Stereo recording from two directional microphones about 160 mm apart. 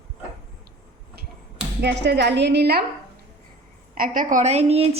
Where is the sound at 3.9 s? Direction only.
60° right (ahead or behind); by 4.8 s 40° right (ahead or behind).